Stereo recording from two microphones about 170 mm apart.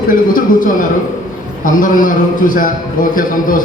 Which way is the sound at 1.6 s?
50° left (ahead or behind).